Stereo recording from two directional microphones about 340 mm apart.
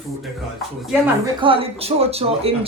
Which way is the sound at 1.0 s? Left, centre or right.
Centre.